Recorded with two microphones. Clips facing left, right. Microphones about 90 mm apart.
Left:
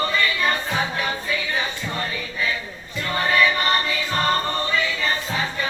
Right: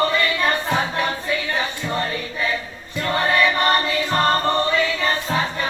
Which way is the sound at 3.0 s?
50° right (ahead or behind).